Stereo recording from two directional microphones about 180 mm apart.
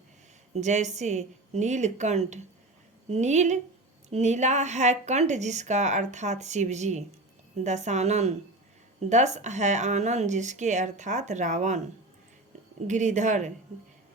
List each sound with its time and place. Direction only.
0.5 s speech: 40° right (ahead or behind)
12.9 s speech: 40° right (ahead or behind)